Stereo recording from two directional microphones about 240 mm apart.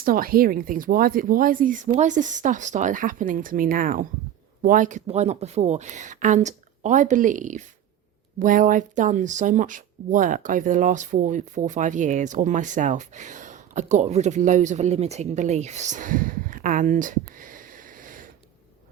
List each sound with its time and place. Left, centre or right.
0.0 s speech: right